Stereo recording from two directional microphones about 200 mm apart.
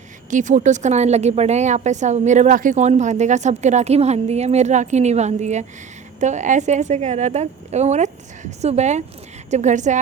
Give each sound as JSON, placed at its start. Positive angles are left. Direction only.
{"t": 0.3, "sound": "a woman's voice", "side_deg": -40}